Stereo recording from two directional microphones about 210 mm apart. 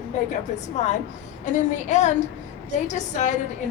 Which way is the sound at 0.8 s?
35° left (ahead or behind).